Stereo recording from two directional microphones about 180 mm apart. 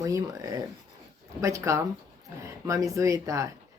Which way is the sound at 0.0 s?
20° right (ahead or behind).